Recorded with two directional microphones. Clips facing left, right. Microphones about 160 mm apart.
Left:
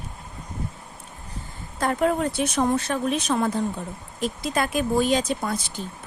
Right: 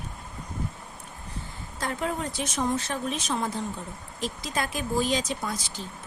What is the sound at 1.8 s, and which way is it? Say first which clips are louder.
Speech: left 8 dB; 60° left (ahead or behind).